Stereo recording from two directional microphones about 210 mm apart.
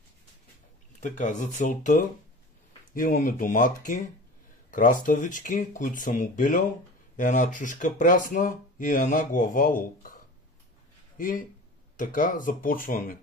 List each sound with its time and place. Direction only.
1.0 s speech: 35° left (ahead or behind)
11.1 s speech: 40° left (ahead or behind)